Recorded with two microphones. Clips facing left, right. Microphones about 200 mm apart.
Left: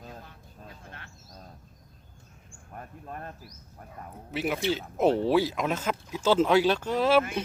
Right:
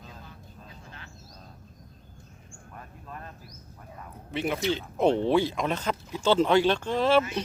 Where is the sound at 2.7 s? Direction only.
45° left (ahead or behind).